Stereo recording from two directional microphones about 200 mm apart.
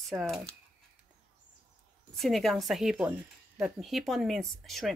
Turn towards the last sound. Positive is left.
turn(degrees=0)  # may be behind; listen again after turning